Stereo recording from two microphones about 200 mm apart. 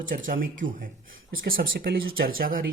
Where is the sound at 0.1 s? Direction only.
45° right (ahead or behind).